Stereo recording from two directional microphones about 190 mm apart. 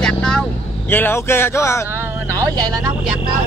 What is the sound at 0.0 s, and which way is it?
Vehicle, 5° left (ahead or behind).